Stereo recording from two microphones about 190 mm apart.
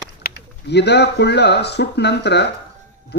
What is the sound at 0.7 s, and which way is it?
Speech, 60° left (ahead or behind).